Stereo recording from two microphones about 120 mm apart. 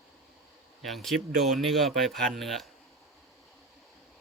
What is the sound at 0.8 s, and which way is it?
A man's voice, centre (ahead or behind).